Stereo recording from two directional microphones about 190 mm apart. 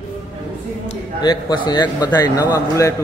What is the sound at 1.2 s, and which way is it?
A man's voice, 20° left (ahead or behind).